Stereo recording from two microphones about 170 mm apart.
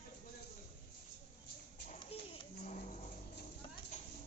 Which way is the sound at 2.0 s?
30° left (ahead or behind).